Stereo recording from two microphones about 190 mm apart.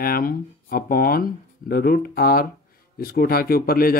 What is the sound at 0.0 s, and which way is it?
Speech, 50° left (ahead or behind).